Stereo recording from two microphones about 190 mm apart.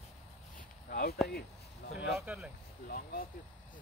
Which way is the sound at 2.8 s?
50° left (ahead or behind).